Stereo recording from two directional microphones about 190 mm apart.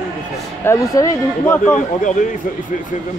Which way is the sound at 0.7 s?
15° left (ahead or behind).